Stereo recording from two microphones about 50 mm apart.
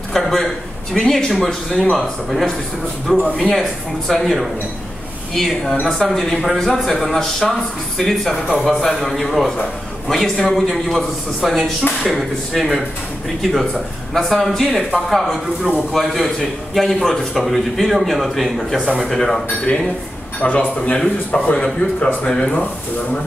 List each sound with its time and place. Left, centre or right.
0.1 s a man's voice: centre
8.8 s a man's voice: centre
20.4 s speech: left
22.0 s speech: centre